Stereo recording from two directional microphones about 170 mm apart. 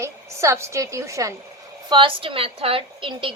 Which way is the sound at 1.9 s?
30° right (ahead or behind).